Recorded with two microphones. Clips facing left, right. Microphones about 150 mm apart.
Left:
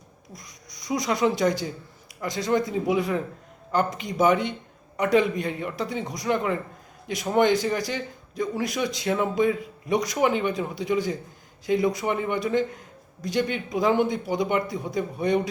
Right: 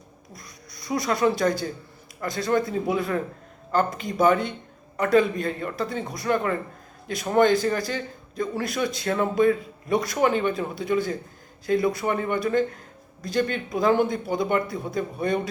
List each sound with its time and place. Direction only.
0.3 s a man's voice: 15° left (ahead or behind)